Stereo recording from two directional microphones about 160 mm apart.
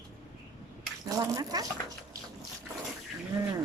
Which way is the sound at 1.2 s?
25° right (ahead or behind).